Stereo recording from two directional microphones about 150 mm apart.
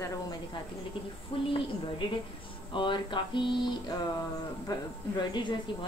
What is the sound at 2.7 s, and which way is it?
A woman's voice, 35° left (ahead or behind).